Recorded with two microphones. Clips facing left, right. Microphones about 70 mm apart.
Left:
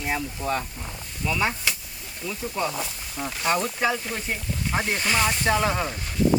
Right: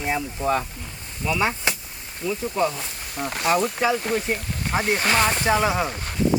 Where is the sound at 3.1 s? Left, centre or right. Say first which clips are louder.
Right 3 dB; right.